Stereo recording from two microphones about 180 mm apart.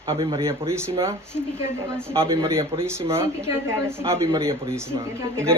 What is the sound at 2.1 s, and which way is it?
Speech, 30° right (ahead or behind).